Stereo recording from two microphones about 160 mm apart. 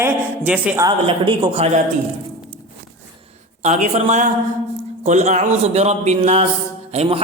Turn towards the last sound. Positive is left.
turn(degrees=-35)  # may be behind; listen again after turning